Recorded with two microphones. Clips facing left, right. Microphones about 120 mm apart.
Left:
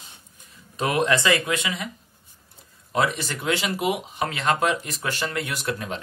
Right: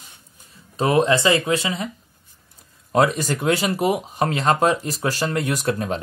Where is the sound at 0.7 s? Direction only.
30° right (ahead or behind).